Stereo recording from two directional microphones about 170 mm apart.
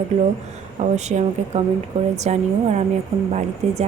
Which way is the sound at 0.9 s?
40° right (ahead or behind).